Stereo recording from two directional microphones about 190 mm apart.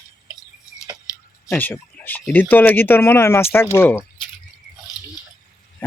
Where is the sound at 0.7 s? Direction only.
15° left (ahead or behind).